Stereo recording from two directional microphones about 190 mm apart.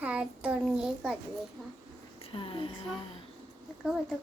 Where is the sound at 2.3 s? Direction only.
25° left (ahead or behind).